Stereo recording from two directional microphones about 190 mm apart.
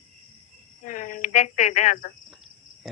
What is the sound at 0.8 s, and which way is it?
Cricket, 45° left (ahead or behind).